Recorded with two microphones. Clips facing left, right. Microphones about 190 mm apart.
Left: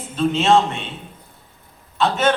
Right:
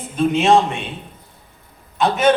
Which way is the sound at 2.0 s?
15° right (ahead or behind).